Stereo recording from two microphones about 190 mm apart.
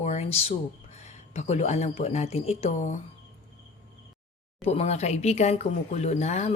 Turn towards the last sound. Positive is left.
turn(degrees=35)  # may be behind; listen again after turning